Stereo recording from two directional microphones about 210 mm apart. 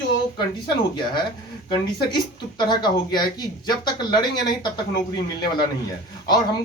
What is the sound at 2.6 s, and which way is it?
Speech, 20° left (ahead or behind).